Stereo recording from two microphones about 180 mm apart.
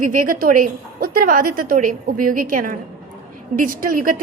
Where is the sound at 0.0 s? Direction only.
45° right (ahead or behind).